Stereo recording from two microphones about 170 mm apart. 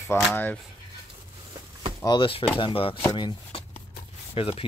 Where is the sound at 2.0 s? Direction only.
25° left (ahead or behind).